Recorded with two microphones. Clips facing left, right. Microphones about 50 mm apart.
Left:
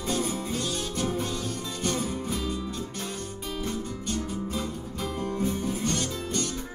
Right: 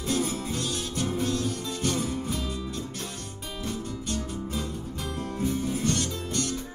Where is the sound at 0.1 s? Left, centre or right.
Centre.